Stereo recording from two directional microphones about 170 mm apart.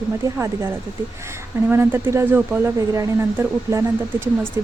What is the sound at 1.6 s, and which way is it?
Speech, 15° right (ahead or behind).